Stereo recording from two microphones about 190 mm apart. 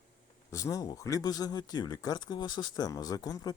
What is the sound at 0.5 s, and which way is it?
Speech, 15° left (ahead or behind).